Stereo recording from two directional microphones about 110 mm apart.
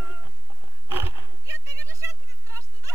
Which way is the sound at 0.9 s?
25° right (ahead or behind).